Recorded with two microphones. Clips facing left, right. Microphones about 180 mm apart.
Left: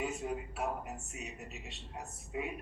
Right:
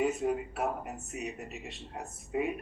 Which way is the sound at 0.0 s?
55° right (ahead or behind).